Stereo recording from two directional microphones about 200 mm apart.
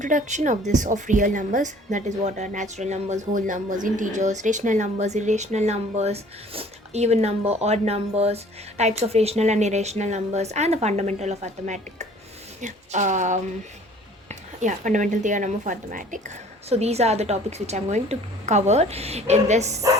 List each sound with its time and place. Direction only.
0.0 s speech: 40° right (ahead or behind)